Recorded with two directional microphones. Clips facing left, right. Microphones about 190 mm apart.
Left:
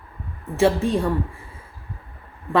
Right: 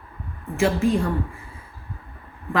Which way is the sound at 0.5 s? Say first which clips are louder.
Left 1 dB; 35° left (ahead or behind).